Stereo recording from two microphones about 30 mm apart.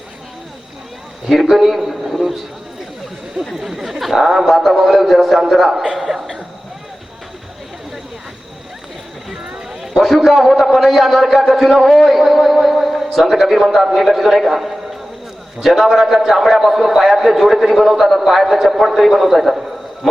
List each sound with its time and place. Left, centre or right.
1.3 s a man's voice: centre
3.5 s a man's voice: centre
5.8 s speech: right
9.3 s clip-clop: right
9.9 s a man's voice: centre
12.0 s a sound: centre
13.6 s a man's voice: centre